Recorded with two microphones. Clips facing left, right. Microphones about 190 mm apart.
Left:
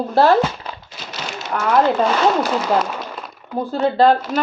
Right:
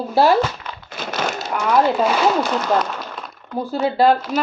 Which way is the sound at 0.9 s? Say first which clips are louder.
Right 10 dB; 50° right (ahead or behind).